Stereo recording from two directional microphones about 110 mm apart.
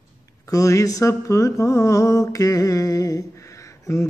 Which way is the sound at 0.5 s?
30° left (ahead or behind).